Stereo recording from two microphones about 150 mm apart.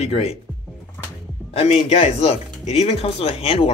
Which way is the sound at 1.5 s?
40° left (ahead or behind).